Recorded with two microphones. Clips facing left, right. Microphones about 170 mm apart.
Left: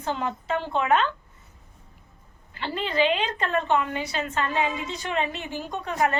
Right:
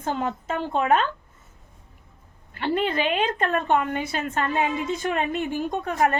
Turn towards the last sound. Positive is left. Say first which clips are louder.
# right 2 dB
turn(degrees=-50)  # may be behind; listen again after turning